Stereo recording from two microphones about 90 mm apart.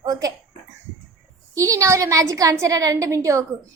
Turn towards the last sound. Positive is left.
turn(degrees=-35)  # may be behind; listen again after turning